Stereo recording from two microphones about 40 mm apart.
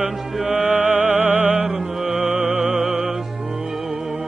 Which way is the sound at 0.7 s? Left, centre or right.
Right.